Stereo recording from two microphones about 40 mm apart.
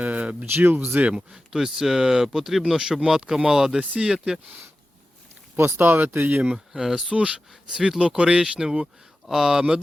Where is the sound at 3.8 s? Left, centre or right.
Right.